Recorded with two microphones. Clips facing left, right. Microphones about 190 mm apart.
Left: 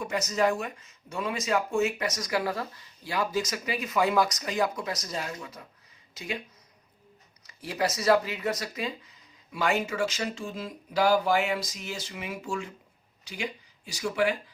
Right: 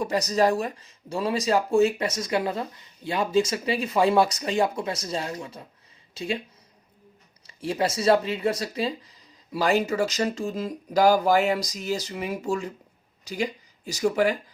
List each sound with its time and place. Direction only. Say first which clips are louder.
0.0 s speech: right 4 dB; 35° right (ahead or behind)
7.4 s speech: right 4 dB; 25° right (ahead or behind)